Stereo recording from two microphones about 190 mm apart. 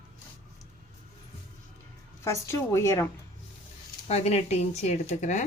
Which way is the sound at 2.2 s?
15° left (ahead or behind).